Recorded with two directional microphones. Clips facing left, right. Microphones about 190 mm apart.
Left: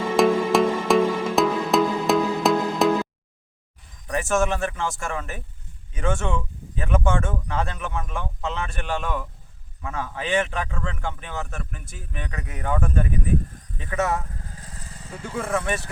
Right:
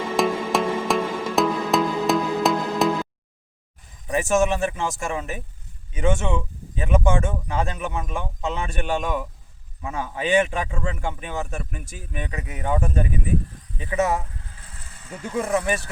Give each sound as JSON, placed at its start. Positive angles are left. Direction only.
{"t": 0.2, "sound": "music", "side_deg": 0}
{"t": 4.0, "sound": "speech", "side_deg": -10}
{"t": 14.3, "sound": "vehicle", "side_deg": 40}
{"t": 15.4, "sound": "speech", "side_deg": -25}